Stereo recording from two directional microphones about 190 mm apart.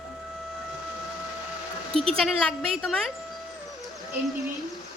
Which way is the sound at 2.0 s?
Centre (ahead or behind).